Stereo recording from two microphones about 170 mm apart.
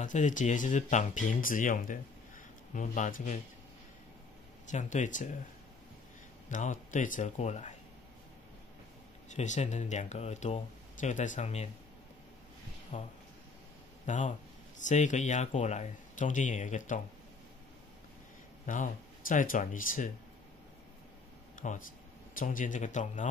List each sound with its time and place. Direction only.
0.0 s speech: 45° left (ahead or behind)
4.6 s speech: 45° left (ahead or behind)
6.5 s speech: 45° left (ahead or behind)
9.3 s speech: 45° left (ahead or behind)
12.9 s a man's voice: 45° left (ahead or behind)
18.7 s speech: 50° left (ahead or behind)
21.5 s speech: 50° left (ahead or behind)